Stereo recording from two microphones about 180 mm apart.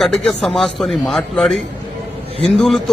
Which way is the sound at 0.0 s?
5° left (ahead or behind).